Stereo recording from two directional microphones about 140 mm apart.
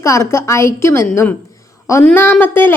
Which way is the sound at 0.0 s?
20° left (ahead or behind).